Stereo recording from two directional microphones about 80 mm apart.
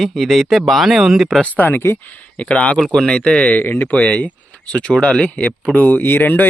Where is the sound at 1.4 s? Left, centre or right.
Left.